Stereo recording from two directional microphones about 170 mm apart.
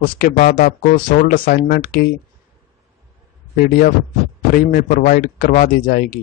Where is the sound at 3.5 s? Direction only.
55° left (ahead or behind).